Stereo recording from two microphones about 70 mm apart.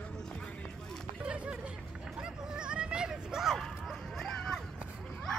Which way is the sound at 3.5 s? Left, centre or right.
Centre.